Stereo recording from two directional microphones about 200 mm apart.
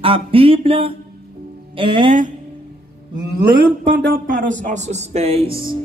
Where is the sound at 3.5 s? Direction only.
60° right (ahead or behind); by 5.5 s 30° right (ahead or behind).